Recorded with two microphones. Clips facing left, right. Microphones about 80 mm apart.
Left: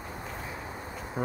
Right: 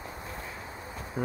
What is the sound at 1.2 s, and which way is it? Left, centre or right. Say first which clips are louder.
Insect: even; left.